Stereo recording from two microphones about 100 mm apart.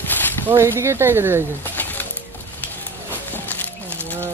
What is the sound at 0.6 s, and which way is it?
Speech, 25° right (ahead or behind).